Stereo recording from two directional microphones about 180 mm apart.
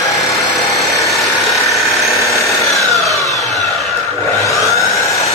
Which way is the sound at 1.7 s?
Centre (ahead or behind).